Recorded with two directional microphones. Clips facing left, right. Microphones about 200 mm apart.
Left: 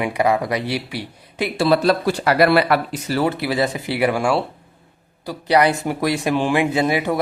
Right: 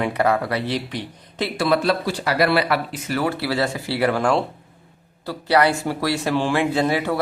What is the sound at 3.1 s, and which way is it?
Speech, 25° left (ahead or behind).